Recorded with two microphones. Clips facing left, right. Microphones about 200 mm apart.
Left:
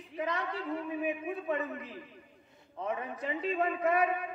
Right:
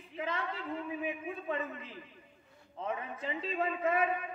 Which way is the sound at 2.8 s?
30° right (ahead or behind).